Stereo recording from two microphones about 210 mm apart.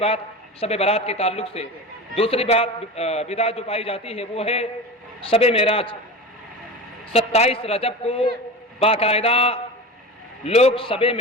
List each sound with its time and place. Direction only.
0.6 s a man's voice: 30° left (ahead or behind)
7.1 s a man's voice: 30° left (ahead or behind)